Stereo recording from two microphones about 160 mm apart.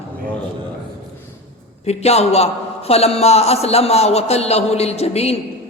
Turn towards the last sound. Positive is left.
turn(degrees=40)  # may be behind; listen again after turning